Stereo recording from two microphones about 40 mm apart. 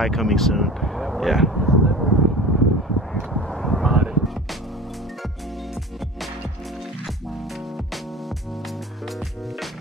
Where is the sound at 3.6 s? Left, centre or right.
Centre.